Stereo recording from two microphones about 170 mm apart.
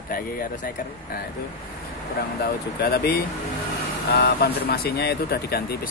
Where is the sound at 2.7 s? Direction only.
70° left (ahead or behind).